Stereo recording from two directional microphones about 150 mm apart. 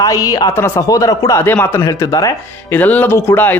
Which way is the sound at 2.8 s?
10° left (ahead or behind).